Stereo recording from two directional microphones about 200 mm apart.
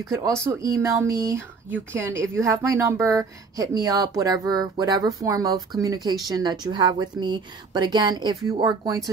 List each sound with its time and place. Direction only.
0.0 s speech: 15° right (ahead or behind)